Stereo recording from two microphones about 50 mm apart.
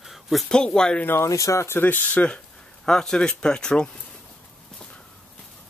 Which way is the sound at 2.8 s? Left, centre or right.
Centre.